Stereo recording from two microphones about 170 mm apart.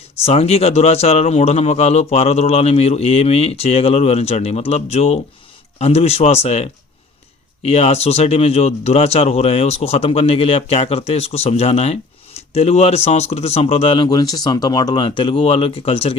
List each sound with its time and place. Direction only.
0.2 s speech: 35° left (ahead or behind)